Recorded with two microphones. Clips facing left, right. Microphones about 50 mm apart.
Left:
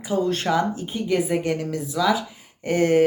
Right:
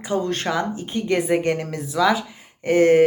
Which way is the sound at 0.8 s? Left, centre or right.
Right.